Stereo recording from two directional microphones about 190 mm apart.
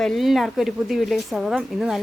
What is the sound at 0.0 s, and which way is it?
Speech, centre (ahead or behind).